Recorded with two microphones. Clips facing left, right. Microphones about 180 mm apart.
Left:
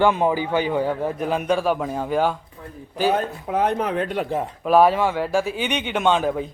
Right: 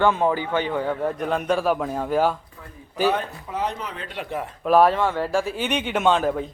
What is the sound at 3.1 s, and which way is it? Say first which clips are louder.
Speech: left 6 dB; 50° left (ahead or behind).